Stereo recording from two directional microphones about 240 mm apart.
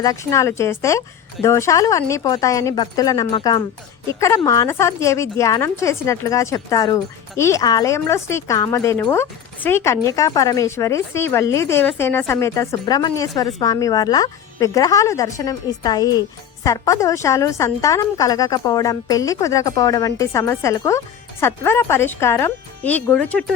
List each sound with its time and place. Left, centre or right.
0.0 s a woman's voice: centre